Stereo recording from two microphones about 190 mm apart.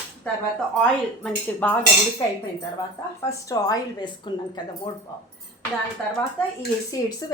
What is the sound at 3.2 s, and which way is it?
A woman's voice, 15° left (ahead or behind).